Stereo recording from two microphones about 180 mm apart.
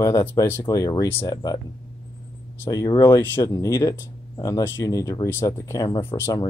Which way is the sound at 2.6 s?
20° left (ahead or behind).